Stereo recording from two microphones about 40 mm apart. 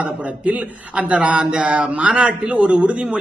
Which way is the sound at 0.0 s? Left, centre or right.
Right.